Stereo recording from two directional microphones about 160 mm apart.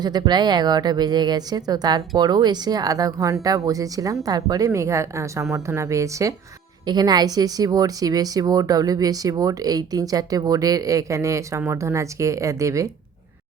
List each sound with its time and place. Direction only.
0.0 s speech: 25° right (ahead or behind)